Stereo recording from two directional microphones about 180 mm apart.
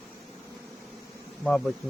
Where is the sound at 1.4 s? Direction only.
Centre (ahead or behind).